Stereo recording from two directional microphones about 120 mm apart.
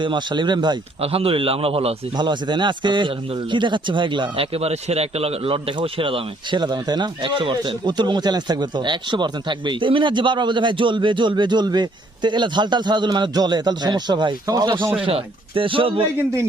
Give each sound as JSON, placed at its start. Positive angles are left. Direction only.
{"t": 0.0, "sound": "a man's voice", "side_deg": -40}
{"t": 1.0, "sound": "a man's voice", "side_deg": -55}
{"t": 2.1, "sound": "a man's voice", "side_deg": -40}
{"t": 15.0, "sound": "a man's voice", "side_deg": -50}